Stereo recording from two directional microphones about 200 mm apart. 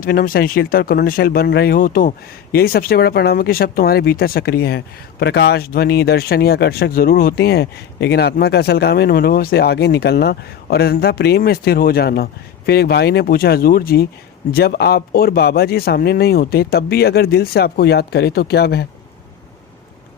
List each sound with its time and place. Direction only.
0.0 s speech: 45° left (ahead or behind)